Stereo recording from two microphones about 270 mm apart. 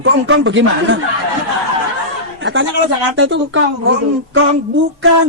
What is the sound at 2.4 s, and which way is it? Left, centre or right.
A man's voice, right.